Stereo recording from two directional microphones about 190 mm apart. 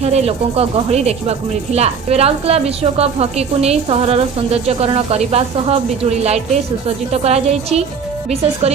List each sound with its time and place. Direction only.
0.0 s speech: 35° right (ahead or behind)